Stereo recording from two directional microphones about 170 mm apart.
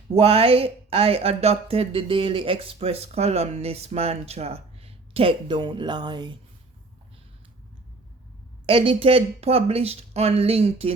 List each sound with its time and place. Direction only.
0.1 s speech: 35° right (ahead or behind)
8.6 s speech: 35° right (ahead or behind)